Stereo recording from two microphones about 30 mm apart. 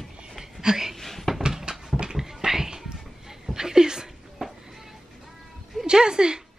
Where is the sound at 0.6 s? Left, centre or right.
Centre.